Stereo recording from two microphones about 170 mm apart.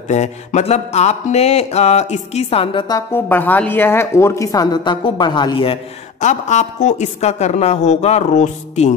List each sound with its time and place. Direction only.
0.1 s mantra: 45° left (ahead or behind)
3.1 s a woman's voice: 10° left (ahead or behind); by 5.8 s 30° left (ahead or behind)
6.2 s mantra: 45° left (ahead or behind)